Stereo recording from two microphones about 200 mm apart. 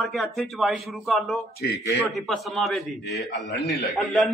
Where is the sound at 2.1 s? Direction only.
Centre (ahead or behind).